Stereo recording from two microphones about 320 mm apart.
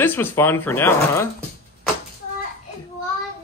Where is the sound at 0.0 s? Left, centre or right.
Centre.